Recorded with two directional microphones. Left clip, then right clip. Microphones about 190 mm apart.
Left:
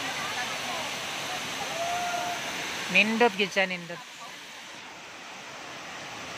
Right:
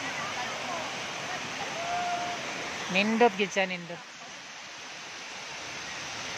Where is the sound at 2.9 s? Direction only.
10° right (ahead or behind).